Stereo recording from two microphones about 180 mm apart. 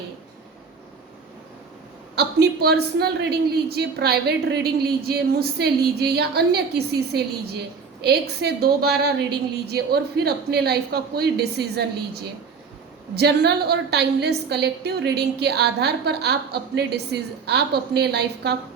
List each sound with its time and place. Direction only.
2.1 s a woman's voice: 65° right (ahead or behind)